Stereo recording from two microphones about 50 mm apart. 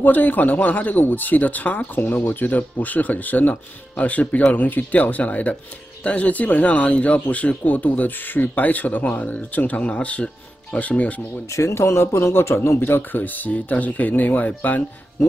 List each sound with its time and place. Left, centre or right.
0.0 s speech: left
11.5 s speech: left